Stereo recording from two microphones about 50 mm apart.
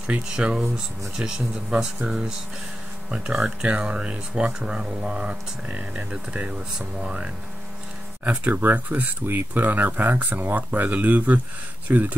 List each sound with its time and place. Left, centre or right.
0.1 s speech: centre
3.4 s speech: centre
8.5 s speech: right